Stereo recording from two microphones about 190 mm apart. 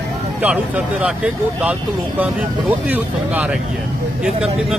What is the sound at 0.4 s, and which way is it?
Speech, 5° right (ahead or behind).